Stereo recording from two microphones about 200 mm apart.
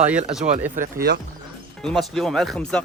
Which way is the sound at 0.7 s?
45° right (ahead or behind).